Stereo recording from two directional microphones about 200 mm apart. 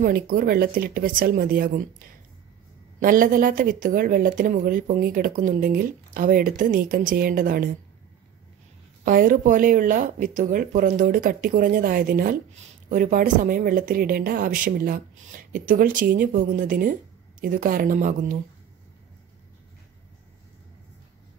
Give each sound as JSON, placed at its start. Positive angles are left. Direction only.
{"t": 0.0, "sound": "speech", "side_deg": -45}
{"t": 9.0, "sound": "speech", "side_deg": -45}